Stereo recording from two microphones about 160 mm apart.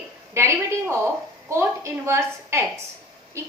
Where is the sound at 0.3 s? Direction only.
15° right (ahead or behind).